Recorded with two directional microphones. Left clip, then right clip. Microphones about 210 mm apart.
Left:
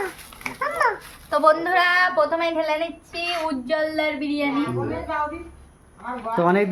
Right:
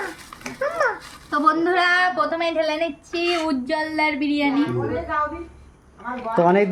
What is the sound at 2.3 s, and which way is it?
Speech, 25° left (ahead or behind).